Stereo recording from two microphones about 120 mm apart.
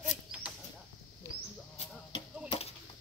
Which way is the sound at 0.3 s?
10° right (ahead or behind).